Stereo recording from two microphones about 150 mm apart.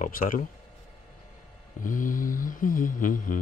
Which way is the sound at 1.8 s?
65° left (ahead or behind).